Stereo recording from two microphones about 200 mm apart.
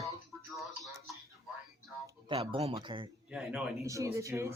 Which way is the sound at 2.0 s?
25° right (ahead or behind).